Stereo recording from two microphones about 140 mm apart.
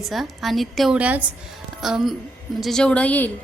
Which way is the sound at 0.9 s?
10° right (ahead or behind).